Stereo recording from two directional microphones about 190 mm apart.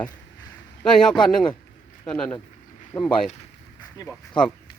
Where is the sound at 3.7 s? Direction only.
20° left (ahead or behind).